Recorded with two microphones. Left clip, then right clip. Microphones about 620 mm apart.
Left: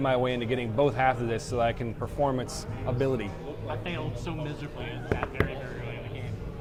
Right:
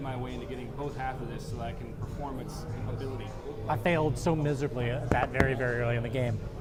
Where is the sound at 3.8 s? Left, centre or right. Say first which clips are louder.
Right 8 dB; right.